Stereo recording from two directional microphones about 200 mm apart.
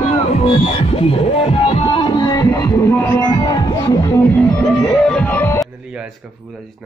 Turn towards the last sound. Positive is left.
turn(degrees=-5)  # may be behind; listen again after turning